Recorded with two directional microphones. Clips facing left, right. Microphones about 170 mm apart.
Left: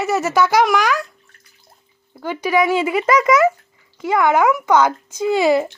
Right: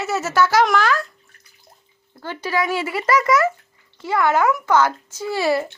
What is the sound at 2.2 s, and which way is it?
Speech, 15° left (ahead or behind).